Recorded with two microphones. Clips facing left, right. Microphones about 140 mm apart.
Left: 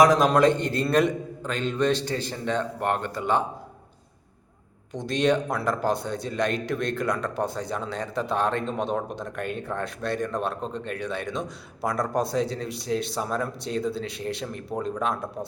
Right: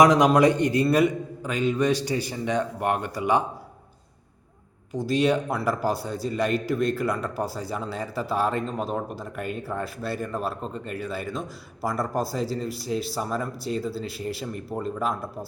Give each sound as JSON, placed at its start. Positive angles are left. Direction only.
{"t": 0.0, "sound": "a man's voice", "side_deg": -20}
{"t": 4.9, "sound": "a man's voice", "side_deg": -5}